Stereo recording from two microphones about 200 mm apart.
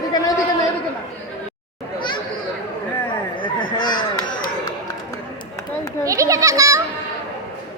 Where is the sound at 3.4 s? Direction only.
25° left (ahead or behind).